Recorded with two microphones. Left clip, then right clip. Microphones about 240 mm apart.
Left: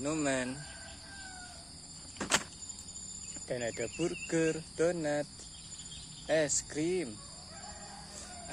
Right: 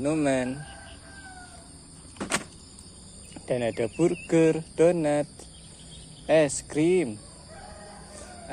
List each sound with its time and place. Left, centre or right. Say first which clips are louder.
0.0 s speech: right 8 dB; centre
3.3 s speech: right 9 dB; right